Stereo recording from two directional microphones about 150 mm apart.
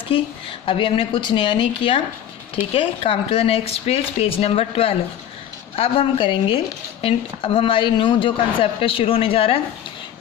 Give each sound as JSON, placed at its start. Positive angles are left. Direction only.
{"t": 0.1, "sound": "speech", "side_deg": 35}